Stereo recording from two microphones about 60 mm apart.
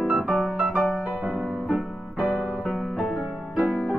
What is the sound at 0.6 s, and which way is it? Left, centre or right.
Music, centre.